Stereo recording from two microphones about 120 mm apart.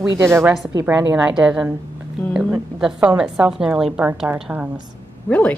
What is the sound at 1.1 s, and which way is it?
A woman's voice, 10° right (ahead or behind).